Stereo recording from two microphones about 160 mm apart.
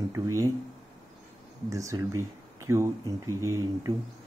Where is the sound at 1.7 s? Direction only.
20° right (ahead or behind).